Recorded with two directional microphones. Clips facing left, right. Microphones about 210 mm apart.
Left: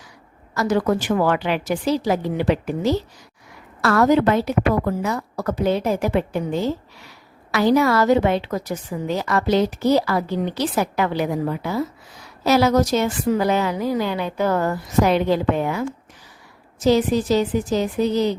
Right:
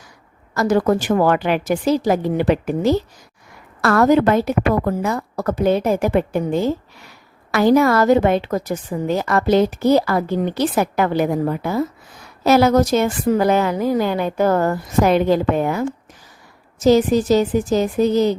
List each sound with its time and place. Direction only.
0.5 s a woman's voice: 45° right (ahead or behind)